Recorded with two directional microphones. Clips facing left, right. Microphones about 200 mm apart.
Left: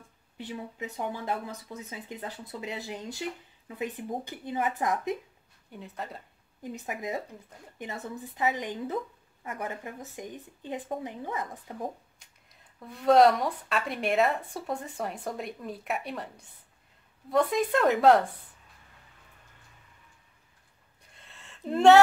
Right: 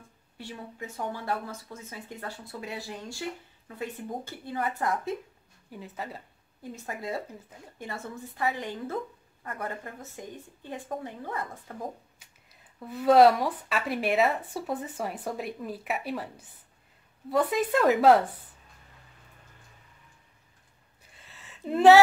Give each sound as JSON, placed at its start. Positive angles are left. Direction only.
{"t": 0.4, "sound": "speech", "side_deg": 20}
{"t": 5.7, "sound": "speech", "side_deg": 0}
{"t": 6.6, "sound": "speech", "side_deg": 20}
{"t": 12.2, "sound": "speech", "side_deg": -5}
{"t": 21.0, "sound": "a sound", "side_deg": -5}